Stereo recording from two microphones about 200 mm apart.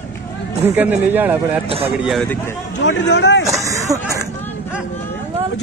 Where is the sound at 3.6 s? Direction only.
15° right (ahead or behind).